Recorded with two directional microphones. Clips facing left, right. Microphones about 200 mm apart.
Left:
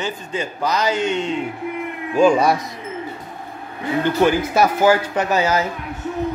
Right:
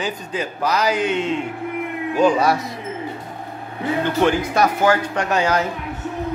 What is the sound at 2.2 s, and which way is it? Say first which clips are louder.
Speech: left 2 dB; 15° left (ahead or behind).